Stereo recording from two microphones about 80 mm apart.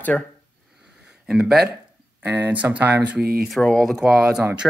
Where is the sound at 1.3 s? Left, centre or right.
Centre.